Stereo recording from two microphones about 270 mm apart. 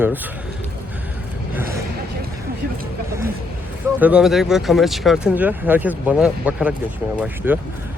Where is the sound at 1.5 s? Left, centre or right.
Centre.